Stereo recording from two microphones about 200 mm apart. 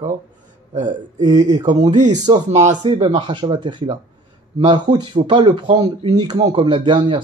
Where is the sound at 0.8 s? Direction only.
40° right (ahead or behind).